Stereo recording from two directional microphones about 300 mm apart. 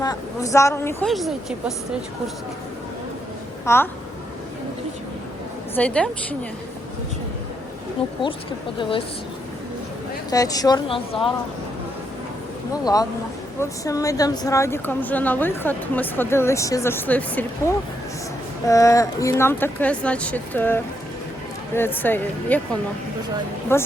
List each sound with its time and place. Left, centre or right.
0.0 s a woman's voice: centre
3.7 s a woman's voice: centre
5.7 s speech: centre
8.8 s a woman's voice: centre
10.2 s a woman's voice: centre
12.7 s a woman's voice: centre
23.7 s a woman's voice: centre